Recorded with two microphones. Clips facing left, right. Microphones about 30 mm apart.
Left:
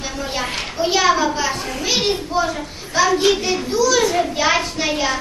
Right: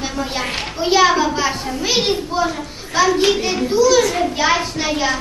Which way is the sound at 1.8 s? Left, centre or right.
Centre.